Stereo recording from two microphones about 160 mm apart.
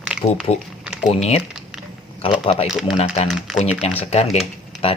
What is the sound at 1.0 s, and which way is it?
Speech, 40° left (ahead or behind).